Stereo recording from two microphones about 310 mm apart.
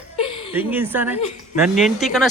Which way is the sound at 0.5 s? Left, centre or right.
Centre.